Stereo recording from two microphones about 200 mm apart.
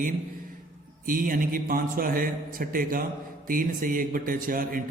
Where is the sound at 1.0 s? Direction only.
45° right (ahead or behind).